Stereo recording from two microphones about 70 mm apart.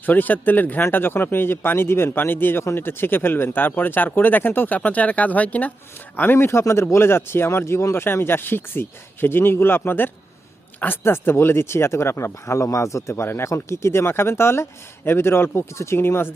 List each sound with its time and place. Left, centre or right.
0.0 s speech: left